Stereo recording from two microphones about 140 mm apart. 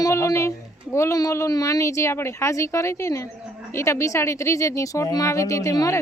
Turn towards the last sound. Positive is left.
turn(degrees=25)  # may be behind; listen again after turning